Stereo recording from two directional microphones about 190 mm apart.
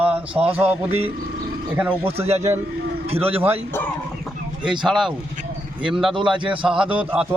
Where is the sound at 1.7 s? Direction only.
10° right (ahead or behind).